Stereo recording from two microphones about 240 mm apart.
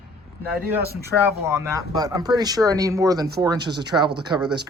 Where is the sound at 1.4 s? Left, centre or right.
Centre.